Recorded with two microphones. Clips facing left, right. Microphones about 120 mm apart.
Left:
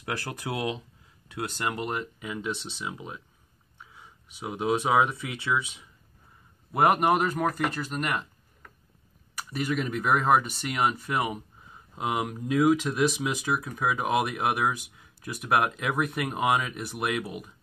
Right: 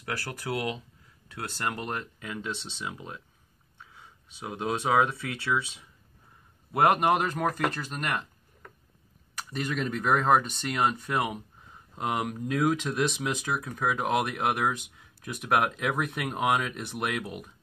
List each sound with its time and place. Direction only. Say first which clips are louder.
0.0 s speech: left 1 dB; 20° left (ahead or behind)
6.7 s speech: left 1 dB; 5° left (ahead or behind)
9.4 s speech: left 2 dB; 5° left (ahead or behind)